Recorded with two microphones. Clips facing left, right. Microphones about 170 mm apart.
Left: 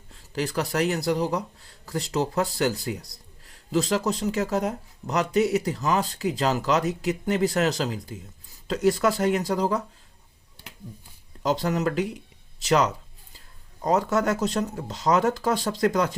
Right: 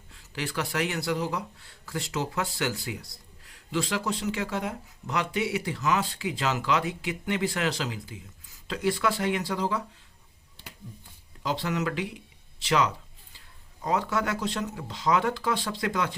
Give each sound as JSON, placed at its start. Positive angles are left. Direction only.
{"t": 0.1, "sound": "speech", "side_deg": 40}
{"t": 11.4, "sound": "speech", "side_deg": 40}